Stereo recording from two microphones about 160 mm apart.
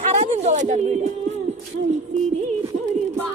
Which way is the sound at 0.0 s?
45° right (ahead or behind).